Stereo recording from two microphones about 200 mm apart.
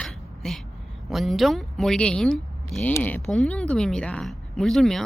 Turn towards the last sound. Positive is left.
turn(degrees=0)  # may be behind; listen again after turning